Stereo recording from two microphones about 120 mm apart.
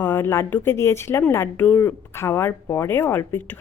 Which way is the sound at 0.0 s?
20° left (ahead or behind).